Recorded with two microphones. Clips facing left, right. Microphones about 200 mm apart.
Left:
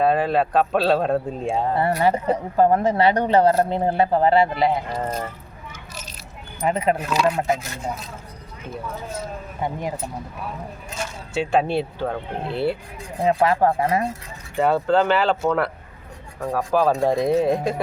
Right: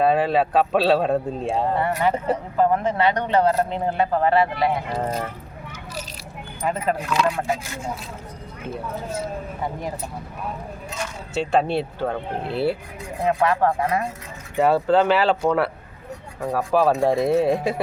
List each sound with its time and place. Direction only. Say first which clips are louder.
0.0 s a man's voice: even; centre (ahead or behind)
1.8 s speech: left 2 dB; 35° left (ahead or behind)
4.9 s a man's voice: right 1 dB; centre (ahead or behind)
7.3 s speech: left 3 dB; 20° left (ahead or behind)
11.3 s a man's voice: even; centre (ahead or behind)
13.2 s speech: left 2 dB; 30° left (ahead or behind)
14.6 s a man's voice: right 1 dB; centre (ahead or behind)